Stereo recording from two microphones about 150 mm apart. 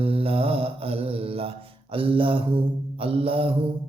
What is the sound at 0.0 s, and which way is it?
Mantra, 40° right (ahead or behind).